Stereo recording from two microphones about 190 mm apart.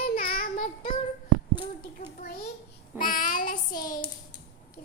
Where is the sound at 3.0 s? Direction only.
45° left (ahead or behind).